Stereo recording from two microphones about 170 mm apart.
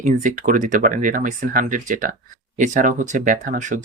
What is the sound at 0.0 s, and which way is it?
Speech, 45° right (ahead or behind).